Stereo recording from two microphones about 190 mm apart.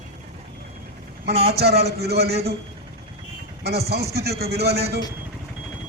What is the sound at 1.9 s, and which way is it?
Speech, 60° right (ahead or behind).